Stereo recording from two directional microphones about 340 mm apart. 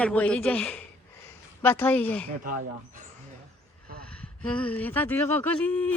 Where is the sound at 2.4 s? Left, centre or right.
Right.